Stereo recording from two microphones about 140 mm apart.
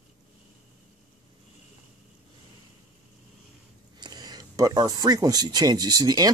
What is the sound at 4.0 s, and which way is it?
Speech, 30° right (ahead or behind).